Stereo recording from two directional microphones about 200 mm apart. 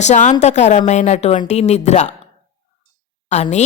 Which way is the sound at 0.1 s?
35° left (ahead or behind).